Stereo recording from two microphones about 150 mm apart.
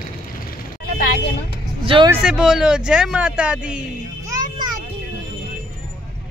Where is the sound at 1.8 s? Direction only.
35° right (ahead or behind).